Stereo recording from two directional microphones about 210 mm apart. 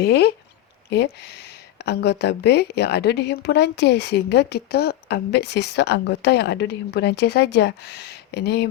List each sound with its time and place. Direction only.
0.0 s speech: 50° left (ahead or behind)